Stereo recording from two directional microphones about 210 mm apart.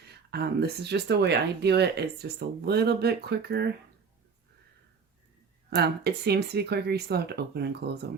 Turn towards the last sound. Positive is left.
turn(degrees=-50)  # may be behind; listen again after turning